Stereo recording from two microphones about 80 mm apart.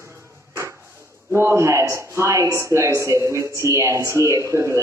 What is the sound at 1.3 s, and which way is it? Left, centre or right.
Speech, right.